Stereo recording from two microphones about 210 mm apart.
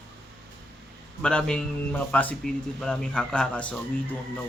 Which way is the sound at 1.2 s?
5° left (ahead or behind).